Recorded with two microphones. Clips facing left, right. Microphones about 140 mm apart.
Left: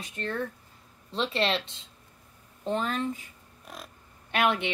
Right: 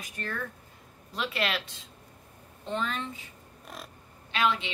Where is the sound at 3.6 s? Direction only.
Centre (ahead or behind).